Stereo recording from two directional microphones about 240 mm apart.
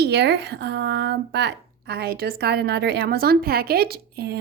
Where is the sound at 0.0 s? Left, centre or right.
Right.